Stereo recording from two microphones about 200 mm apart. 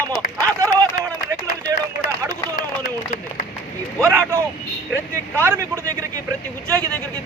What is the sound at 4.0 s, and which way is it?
Vehicle, 15° right (ahead or behind).